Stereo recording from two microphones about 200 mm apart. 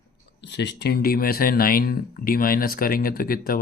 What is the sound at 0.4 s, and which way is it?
Speech, 60° left (ahead or behind).